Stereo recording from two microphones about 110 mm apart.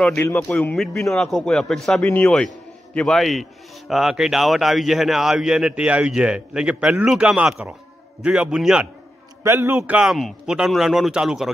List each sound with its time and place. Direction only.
0.1 s a man's voice: 25° left (ahead or behind)
0.4 s speech: 15° left (ahead or behind)
0.7 s a man's voice: 5° left (ahead or behind)
9.4 s a man's voice: 25° right (ahead or behind)
9.9 s a man's voice: centre (ahead or behind)